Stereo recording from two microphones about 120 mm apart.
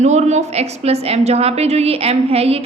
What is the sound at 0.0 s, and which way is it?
A woman's voice, 70° right (ahead or behind).